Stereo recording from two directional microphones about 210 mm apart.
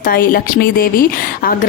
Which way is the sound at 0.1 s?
45° left (ahead or behind).